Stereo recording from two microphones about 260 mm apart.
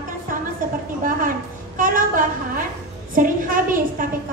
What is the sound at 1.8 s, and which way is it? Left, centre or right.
A woman's voice, right.